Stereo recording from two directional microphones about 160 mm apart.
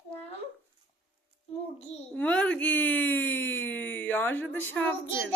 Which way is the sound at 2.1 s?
10° left (ahead or behind).